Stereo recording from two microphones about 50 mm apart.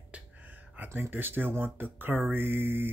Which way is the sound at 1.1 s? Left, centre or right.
Right.